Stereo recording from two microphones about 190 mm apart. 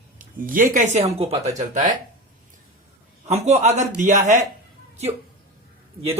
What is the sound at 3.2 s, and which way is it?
A man's voice, 35° right (ahead or behind).